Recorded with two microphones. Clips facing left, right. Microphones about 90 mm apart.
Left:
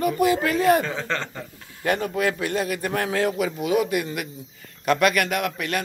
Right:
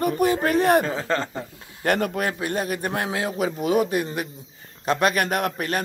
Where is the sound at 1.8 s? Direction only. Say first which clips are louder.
Right 1 dB; 55° right (ahead or behind).